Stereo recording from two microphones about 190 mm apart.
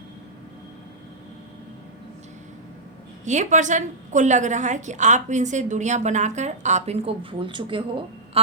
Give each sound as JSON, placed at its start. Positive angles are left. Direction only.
{"t": 3.2, "sound": "a woman's voice", "side_deg": -40}